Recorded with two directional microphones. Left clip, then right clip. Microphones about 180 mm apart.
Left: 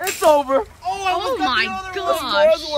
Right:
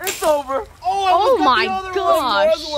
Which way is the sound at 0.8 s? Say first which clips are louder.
Right 4 dB; 60° right (ahead or behind).